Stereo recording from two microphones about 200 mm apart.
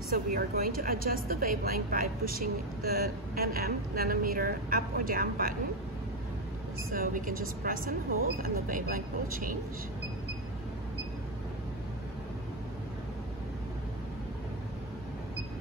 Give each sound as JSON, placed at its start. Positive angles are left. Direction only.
{"t": 0.1, "sound": "speech", "side_deg": -45}
{"t": 6.9, "sound": "speech", "side_deg": -45}